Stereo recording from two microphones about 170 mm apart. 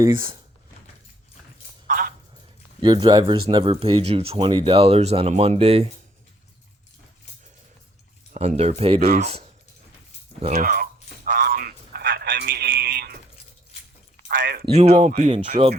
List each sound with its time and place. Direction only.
0.0 s speech: 25° right (ahead or behind)
1.9 s a sound: 55° right (ahead or behind)
2.8 s speech: 25° right (ahead or behind)
8.3 s speech: 40° right (ahead or behind)
10.6 s speech: 55° right (ahead or behind)
11.3 s a sound: 60° right (ahead or behind)
14.3 s a sound: 65° right (ahead or behind)
14.8 s speech: 40° right (ahead or behind)
15.3 s speech: 35° right (ahead or behind)